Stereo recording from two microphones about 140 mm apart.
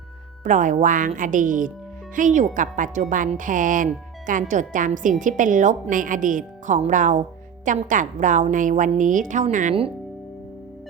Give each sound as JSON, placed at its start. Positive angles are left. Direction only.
{"t": 0.4, "sound": "a woman's voice", "side_deg": -65}